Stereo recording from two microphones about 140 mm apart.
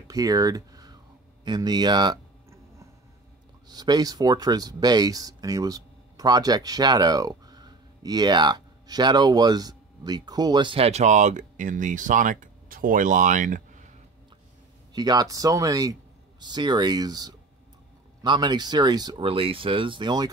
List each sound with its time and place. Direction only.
0.1 s speech: 25° right (ahead or behind)
3.6 s speech: 30° right (ahead or behind); by 13.9 s 65° right (ahead or behind)
15.0 s speech: 30° right (ahead or behind)
19.2 s speech: 40° right (ahead or behind)